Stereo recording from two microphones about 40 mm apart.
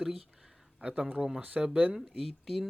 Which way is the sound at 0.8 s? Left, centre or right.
Right.